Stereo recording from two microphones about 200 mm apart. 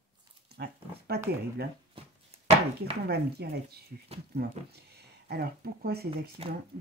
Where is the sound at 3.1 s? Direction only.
55° right (ahead or behind).